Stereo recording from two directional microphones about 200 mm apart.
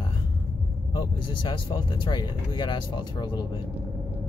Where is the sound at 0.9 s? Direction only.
25° left (ahead or behind).